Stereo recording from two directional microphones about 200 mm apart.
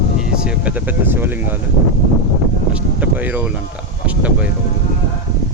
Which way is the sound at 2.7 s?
5° right (ahead or behind).